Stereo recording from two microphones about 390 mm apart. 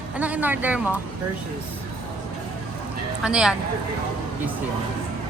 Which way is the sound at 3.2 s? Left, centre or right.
Centre.